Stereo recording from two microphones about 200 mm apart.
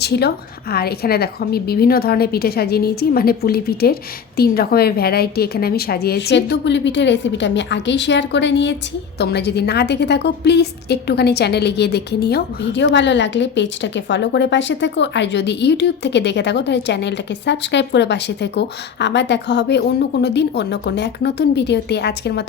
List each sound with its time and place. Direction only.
0.0 s a woman's voice: 55° left (ahead or behind)